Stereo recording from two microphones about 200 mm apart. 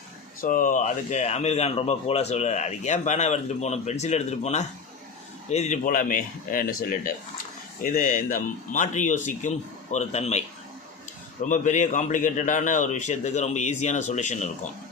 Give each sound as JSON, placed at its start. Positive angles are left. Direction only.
{"t": 0.4, "sound": "a man's voice", "side_deg": 40}
{"t": 11.4, "sound": "a man's voice", "side_deg": 40}